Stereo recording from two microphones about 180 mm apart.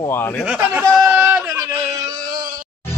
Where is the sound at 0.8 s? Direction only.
5° right (ahead or behind).